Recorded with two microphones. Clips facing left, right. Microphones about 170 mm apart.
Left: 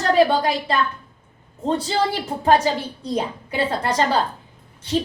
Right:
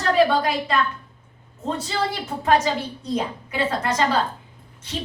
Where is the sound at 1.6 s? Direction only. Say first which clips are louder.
Left 4 dB; 30° left (ahead or behind).